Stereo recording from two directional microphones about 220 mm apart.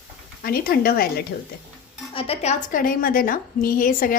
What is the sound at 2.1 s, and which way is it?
A woman's voice, 25° left (ahead or behind).